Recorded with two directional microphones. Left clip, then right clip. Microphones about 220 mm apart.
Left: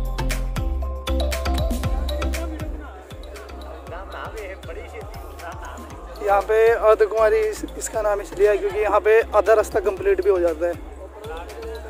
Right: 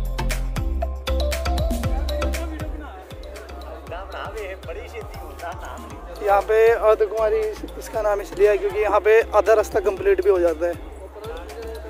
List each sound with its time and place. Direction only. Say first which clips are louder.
0.2 s music: even; centre (ahead or behind)
3.9 s music: right 2 dB; 55° right (ahead or behind)
4.9 s music: right 1 dB; centre (ahead or behind)
6.1 s speech: right 1 dB; centre (ahead or behind)
7.0 s speech: left 3 dB; 15° left (ahead or behind)
7.4 s speech: left 2 dB; centre (ahead or behind)